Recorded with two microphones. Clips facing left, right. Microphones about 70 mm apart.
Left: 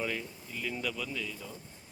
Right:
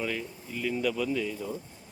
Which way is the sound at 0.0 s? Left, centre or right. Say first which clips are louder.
Right 3 dB; centre.